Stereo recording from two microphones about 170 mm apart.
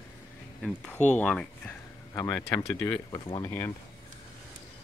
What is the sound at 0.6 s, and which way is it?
Speech, 5° left (ahead or behind).